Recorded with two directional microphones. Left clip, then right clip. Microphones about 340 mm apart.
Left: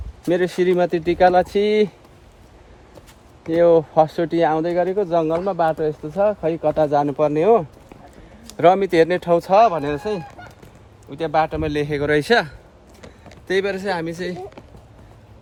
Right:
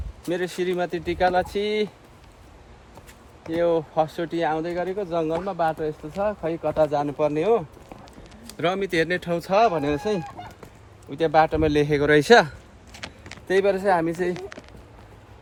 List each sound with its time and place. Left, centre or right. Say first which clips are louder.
0.3 s speech: left 8 dB; left
3.5 s speech: left 8 dB; left; by 14.3 s centre